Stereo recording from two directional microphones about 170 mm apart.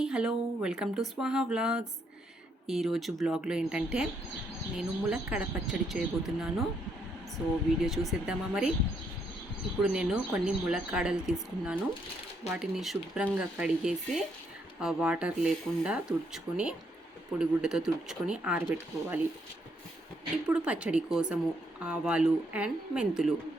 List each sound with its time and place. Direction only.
0.0 s speech: 5° right (ahead or behind)
7.9 s speech: centre (ahead or behind)
9.8 s speech: 5° right (ahead or behind)
20.5 s a woman's voice: 5° right (ahead or behind)